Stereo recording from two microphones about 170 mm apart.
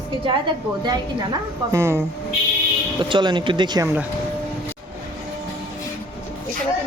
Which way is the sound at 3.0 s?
25° right (ahead or behind).